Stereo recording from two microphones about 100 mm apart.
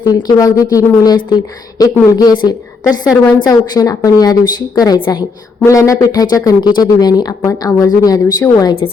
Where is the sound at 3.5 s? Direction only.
35° left (ahead or behind).